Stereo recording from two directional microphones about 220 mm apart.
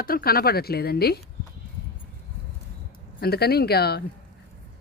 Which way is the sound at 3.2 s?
45° left (ahead or behind).